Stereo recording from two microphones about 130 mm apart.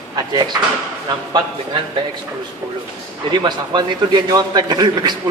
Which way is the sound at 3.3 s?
35° right (ahead or behind).